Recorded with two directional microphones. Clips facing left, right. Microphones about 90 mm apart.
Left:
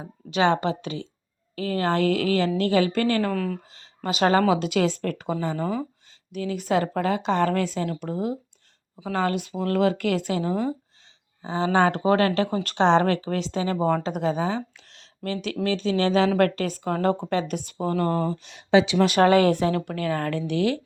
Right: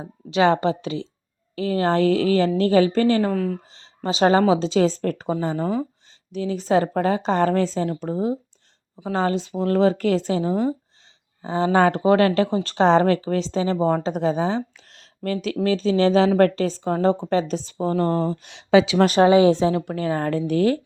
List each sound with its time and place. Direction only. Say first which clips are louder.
0.3 s a woman's voice: right 3 dB; 35° right (ahead or behind)
3.3 s speech: right 3 dB; 10° right (ahead or behind)
3.7 s a woman's voice: right 3 dB; 30° right (ahead or behind)
11.4 s a woman's voice: right 3 dB; 35° right (ahead or behind)
18.4 s speech: right 3 dB; 55° right (ahead or behind)
19.2 s speech: right 3 dB; 15° right (ahead or behind); by 20.8 s 40° right (ahead or behind)